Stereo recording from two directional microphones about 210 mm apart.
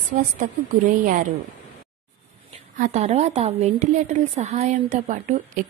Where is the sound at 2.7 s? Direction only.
35° right (ahead or behind).